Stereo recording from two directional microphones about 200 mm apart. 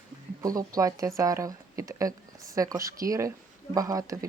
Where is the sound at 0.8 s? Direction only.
15° right (ahead or behind).